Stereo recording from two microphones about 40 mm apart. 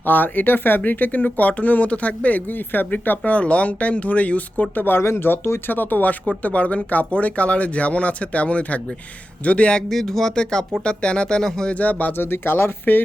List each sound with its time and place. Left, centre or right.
0.0 s speech: left
2.5 s speech: left
3.2 s speech: left
4.9 s speech: left
9.9 s speech: centre
10.3 s speech: centre
11.7 s speech: left
12.1 s speech: left